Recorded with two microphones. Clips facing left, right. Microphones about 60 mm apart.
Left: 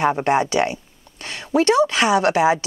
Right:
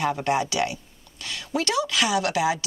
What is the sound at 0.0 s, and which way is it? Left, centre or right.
Speech, left.